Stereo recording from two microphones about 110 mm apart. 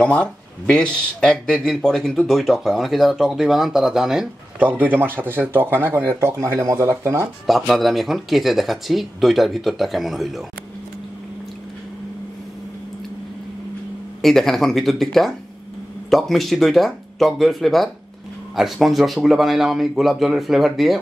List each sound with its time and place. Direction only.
0.0 s speech: 10° left (ahead or behind)
4.6 s speech: 15° right (ahead or behind)
7.4 s speech: centre (ahead or behind)
14.2 s speech: 5° left (ahead or behind)